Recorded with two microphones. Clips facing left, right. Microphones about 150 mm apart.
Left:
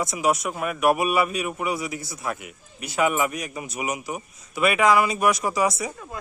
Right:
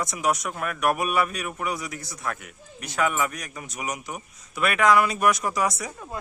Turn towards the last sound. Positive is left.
turn(degrees=0)  # may be behind; listen again after turning